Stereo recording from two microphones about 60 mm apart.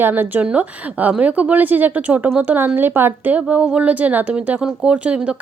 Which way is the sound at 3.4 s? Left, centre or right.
Centre.